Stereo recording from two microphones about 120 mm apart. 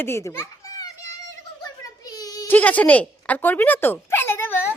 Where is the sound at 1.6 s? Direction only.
30° left (ahead or behind).